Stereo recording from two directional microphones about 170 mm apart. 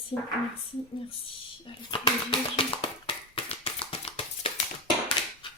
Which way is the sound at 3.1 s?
35° left (ahead or behind).